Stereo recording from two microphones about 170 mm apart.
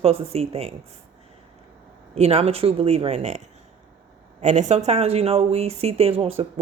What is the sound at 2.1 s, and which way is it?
Speech, 40° right (ahead or behind).